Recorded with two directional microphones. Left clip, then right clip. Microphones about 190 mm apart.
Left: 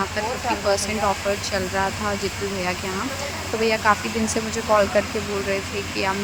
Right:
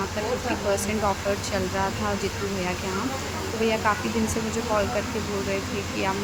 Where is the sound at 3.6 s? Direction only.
25° left (ahead or behind).